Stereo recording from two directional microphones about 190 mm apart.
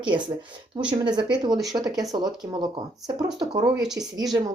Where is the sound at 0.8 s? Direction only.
25° right (ahead or behind).